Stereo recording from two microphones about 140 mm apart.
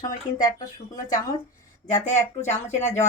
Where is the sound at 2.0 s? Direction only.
60° left (ahead or behind).